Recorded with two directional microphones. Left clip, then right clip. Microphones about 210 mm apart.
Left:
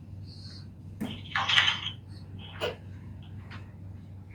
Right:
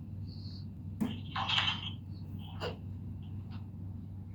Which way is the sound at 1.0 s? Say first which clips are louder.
Left 7 dB; 50° left (ahead or behind).